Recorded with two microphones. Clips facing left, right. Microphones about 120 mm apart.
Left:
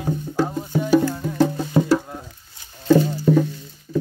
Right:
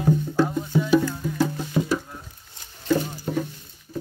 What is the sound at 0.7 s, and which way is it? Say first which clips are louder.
Music: left 3 dB; 45° left (ahead or behind).